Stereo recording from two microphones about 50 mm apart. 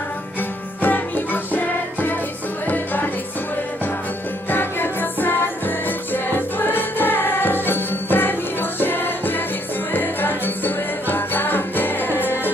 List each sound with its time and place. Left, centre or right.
0.8 s music: left
4.4 s music: left
6.6 s music: left